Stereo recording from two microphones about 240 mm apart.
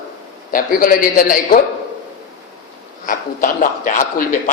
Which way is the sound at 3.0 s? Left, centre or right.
Left.